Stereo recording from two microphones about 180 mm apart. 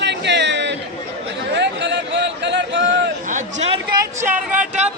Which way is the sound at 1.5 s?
75° right (ahead or behind).